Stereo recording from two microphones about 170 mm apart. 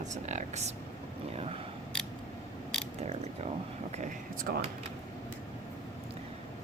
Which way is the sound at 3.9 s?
50° right (ahead or behind).